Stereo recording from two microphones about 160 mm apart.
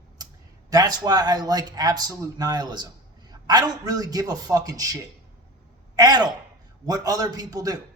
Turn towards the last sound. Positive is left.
turn(degrees=-25)  # may be behind; listen again after turning